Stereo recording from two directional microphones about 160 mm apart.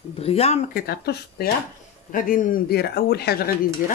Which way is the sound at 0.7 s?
75° left (ahead or behind).